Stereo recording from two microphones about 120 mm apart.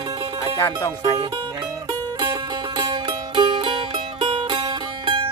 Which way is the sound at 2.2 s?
35° right (ahead or behind).